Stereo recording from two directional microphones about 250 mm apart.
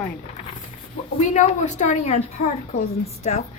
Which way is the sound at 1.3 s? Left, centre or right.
Left.